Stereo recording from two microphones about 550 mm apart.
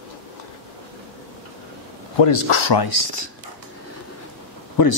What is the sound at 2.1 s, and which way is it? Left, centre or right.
Speech, left.